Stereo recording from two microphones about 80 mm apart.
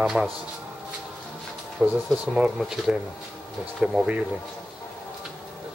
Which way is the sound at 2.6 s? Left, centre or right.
Centre.